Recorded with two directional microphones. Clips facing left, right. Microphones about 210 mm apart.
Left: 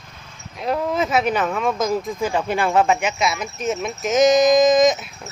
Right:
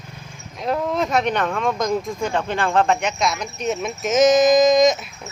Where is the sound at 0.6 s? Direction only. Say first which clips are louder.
Even; centre (ahead or behind).